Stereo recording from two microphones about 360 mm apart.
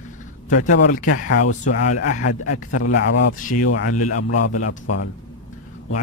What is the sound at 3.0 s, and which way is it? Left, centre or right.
Speech, left.